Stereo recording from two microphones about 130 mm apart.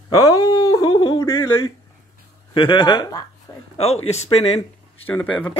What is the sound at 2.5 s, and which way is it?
Speech, 40° left (ahead or behind).